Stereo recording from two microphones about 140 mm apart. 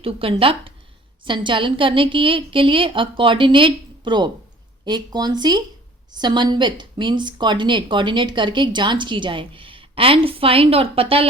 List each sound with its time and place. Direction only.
0.0 s a woman's voice: 40° right (ahead or behind)